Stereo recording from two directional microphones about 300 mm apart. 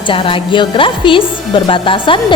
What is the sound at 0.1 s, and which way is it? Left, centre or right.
A woman's voice, centre.